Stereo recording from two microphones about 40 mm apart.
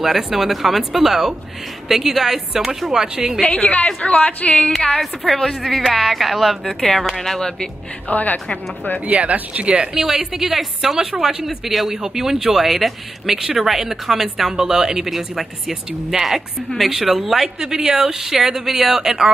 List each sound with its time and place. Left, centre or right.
0.0 s a woman's voice: centre
3.3 s a woman's voice: left
5.2 s a woman's voice: centre
6.8 s a woman's voice: centre
8.1 s a woman's voice: left
9.0 s speech: right
9.9 s a woman's voice: centre
15.0 s a woman's voice: centre
17.6 s a woman's voice: centre